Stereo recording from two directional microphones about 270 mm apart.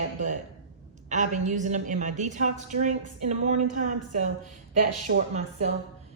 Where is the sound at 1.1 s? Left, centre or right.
Right.